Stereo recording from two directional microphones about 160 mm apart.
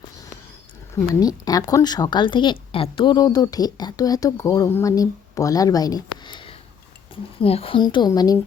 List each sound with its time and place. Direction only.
1.2 s speech: 25° left (ahead or behind)